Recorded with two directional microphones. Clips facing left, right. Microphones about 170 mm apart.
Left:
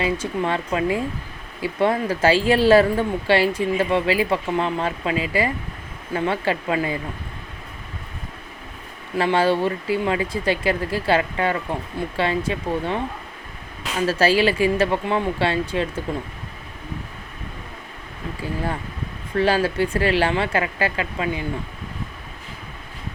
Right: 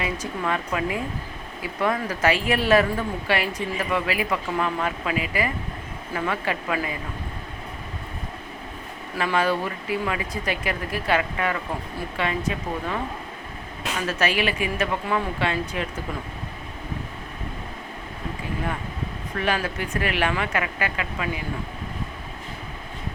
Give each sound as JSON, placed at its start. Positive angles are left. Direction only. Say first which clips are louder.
{"t": 0.0, "sound": "speech", "louder": "left 5 dB", "side_deg": 30}
{"t": 9.1, "sound": "speech", "louder": "left 4 dB", "side_deg": 30}
{"t": 14.1, "sound": "speech", "louder": "left 6 dB", "side_deg": 30}
{"t": 19.4, "sound": "speech", "louder": "left 7 dB", "side_deg": 30}